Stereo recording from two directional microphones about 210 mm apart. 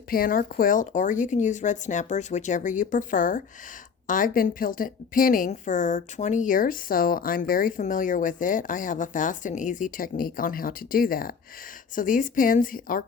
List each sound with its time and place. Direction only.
0.1 s a woman's voice: 45° left (ahead or behind)